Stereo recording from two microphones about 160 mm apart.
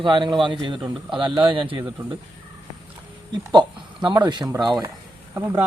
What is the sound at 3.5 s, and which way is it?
Speech, 30° right (ahead or behind).